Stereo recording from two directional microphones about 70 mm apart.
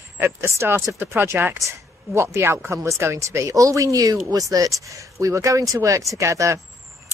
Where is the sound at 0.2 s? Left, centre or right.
Right.